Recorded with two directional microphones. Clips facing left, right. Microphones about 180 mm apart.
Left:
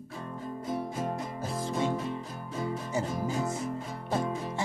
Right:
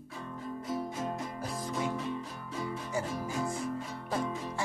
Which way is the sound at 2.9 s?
20° left (ahead or behind).